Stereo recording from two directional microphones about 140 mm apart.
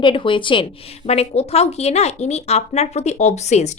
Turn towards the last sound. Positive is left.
turn(degrees=55)  # may be behind; listen again after turning